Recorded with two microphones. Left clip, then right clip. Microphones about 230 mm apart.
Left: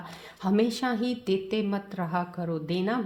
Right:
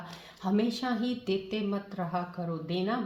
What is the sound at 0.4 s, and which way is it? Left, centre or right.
Speech, left.